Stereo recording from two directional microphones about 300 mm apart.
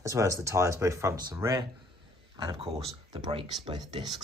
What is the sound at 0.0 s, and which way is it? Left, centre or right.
Speech, centre.